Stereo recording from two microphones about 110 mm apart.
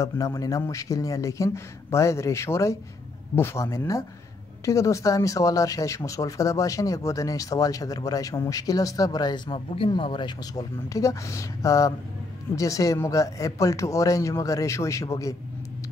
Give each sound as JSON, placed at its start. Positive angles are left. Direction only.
{"t": 0.0, "sound": "speech", "side_deg": 30}